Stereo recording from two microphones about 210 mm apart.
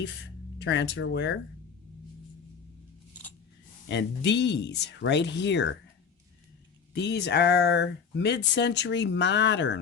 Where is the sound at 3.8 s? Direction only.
55° left (ahead or behind).